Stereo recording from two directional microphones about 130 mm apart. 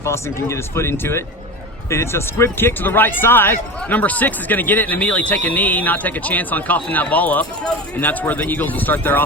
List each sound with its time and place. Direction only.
0.0 s speech: 20° left (ahead or behind)